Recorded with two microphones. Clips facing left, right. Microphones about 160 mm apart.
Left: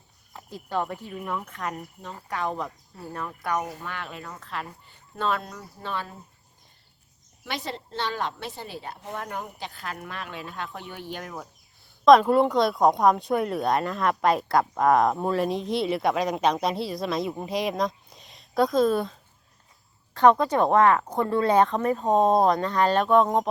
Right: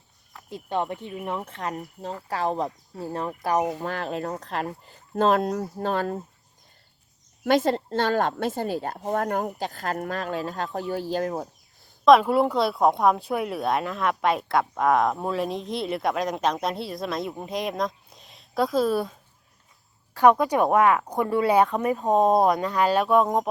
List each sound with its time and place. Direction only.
0.5 s speech: 20° right (ahead or behind)
3.8 s speech: 40° right (ahead or behind)
7.4 s a woman's voice: 45° right (ahead or behind)
12.0 s speech: 5° right (ahead or behind)
20.1 s speech: 10° right (ahead or behind)